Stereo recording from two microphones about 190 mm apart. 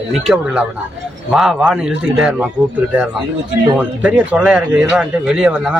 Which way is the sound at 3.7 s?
5° right (ahead or behind).